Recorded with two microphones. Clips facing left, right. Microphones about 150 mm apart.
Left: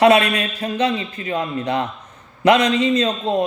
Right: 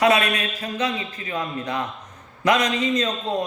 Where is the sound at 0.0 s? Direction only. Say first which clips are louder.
Left 5 dB; 30° left (ahead or behind).